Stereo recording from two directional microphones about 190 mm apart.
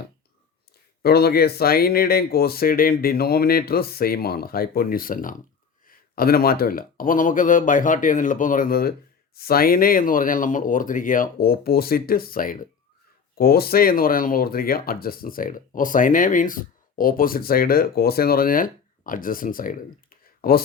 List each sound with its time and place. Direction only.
1.0 s speech: 55° left (ahead or behind)